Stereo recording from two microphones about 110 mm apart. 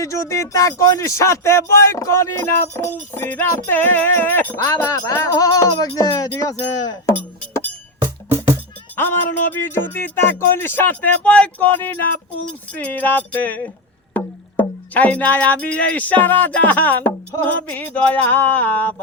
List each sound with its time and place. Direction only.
0.0 s speech: 30° left (ahead or behind)
4.5 s music: 30° left (ahead or behind)
8.3 s music: 25° right (ahead or behind)
9.0 s speech: 20° left (ahead or behind)
12.7 s music: 15° left (ahead or behind)